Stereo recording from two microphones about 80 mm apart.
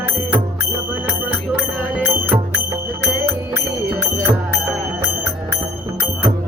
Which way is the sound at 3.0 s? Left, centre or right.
Right.